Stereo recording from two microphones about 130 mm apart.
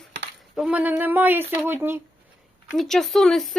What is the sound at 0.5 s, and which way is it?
Speech, 10° right (ahead or behind).